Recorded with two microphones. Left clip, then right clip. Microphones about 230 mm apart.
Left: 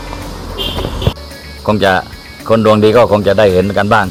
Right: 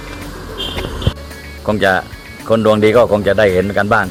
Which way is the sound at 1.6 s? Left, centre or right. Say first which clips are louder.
Left 2 dB; right.